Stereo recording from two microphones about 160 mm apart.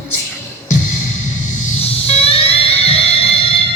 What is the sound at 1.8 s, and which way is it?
Music, 40° left (ahead or behind).